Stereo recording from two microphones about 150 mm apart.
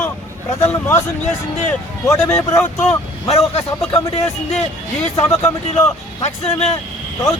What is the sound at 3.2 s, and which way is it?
Speech, 40° left (ahead or behind).